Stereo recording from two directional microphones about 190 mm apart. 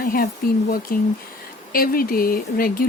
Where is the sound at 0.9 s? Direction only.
50° left (ahead or behind).